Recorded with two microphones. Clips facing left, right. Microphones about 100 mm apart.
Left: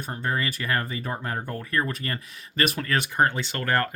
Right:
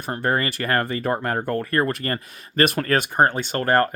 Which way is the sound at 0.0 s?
75° right (ahead or behind).